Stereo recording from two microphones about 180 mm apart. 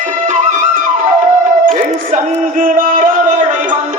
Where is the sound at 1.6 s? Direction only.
50° right (ahead or behind).